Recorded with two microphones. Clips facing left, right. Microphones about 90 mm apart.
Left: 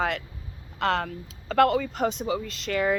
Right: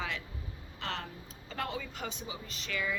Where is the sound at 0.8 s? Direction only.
90° left.